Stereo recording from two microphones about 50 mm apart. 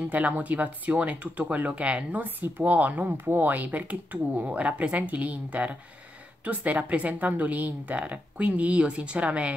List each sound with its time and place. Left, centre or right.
0.1 s speech: right
2.2 s speech: right
3.1 s speech: right